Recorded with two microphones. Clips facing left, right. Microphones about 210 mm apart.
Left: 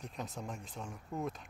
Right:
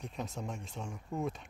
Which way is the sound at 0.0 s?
Centre (ahead or behind).